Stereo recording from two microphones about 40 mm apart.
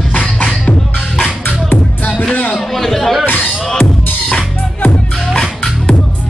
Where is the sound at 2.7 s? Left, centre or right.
Centre.